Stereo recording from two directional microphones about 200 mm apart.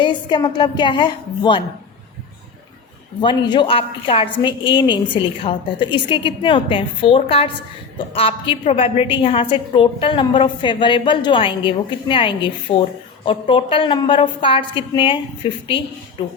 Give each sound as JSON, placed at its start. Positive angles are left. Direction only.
{"t": 0.0, "sound": "a woman's voice", "side_deg": 20}
{"t": 3.2, "sound": "a woman's voice", "side_deg": 20}